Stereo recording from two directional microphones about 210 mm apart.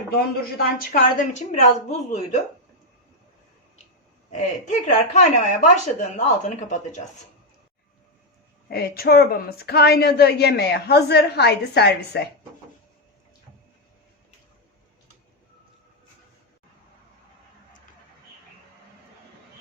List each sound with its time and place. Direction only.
0.1 s a woman's voice: 45° left (ahead or behind)
4.3 s a woman's voice: 35° left (ahead or behind)
8.7 s a woman's voice: 45° left (ahead or behind)